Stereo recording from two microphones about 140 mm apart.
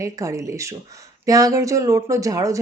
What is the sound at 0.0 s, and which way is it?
A woman's voice, 25° right (ahead or behind).